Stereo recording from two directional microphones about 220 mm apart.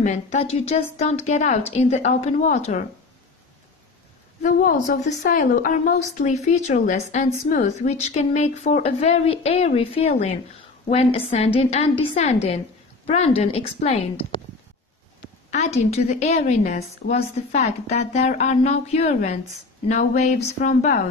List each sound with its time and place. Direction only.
0.0 s a woman's voice: 30° left (ahead or behind)
4.4 s a woman's voice: 35° left (ahead or behind)
15.5 s a woman's voice: 30° left (ahead or behind)